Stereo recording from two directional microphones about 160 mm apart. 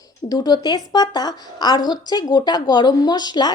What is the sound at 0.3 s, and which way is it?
A woman's voice, 25° left (ahead or behind).